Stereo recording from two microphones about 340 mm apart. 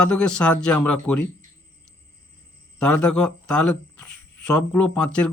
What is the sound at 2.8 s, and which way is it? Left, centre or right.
Speech, left.